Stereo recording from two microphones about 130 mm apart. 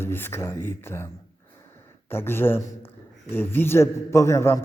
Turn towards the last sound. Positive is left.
turn(degrees=20)  # may be behind; listen again after turning